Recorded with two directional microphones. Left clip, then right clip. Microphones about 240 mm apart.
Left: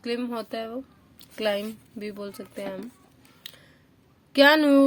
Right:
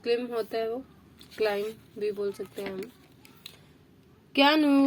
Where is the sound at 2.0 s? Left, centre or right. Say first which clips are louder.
Right 6 dB; left.